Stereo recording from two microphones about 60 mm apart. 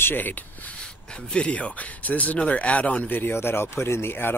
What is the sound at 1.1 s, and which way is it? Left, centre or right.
Speech, centre.